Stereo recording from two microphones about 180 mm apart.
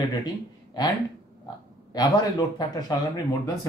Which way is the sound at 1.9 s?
20° left (ahead or behind).